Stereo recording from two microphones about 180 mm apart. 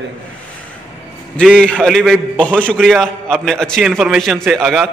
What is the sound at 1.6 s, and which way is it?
A man's voice, 5° left (ahead or behind).